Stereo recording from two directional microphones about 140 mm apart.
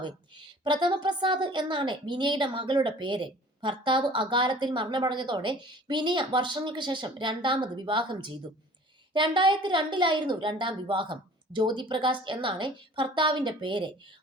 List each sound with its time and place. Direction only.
0.0 s a woman's voice: 35° right (ahead or behind)